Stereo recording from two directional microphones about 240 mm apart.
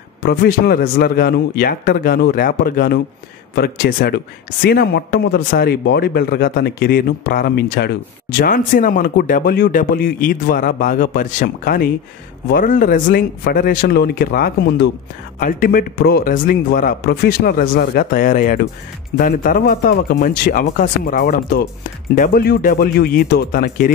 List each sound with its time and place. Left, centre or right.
0.2 s speech: left